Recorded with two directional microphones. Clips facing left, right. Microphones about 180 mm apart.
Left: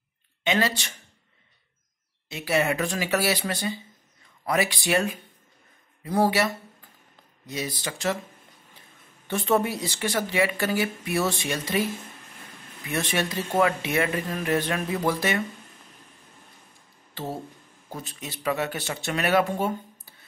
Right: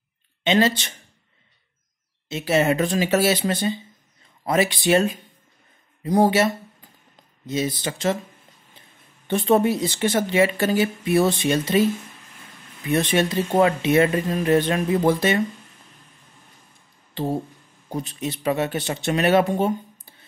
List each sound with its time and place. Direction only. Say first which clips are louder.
0.4 s speech: right 6 dB; 25° right (ahead or behind)
2.2 s speech: right 5 dB; 25° right (ahead or behind)
9.3 s speech: right 5 dB; 20° right (ahead or behind)
12.9 s speech: right 7 dB; 25° right (ahead or behind)
17.1 s speech: right 8 dB; 20° right (ahead or behind)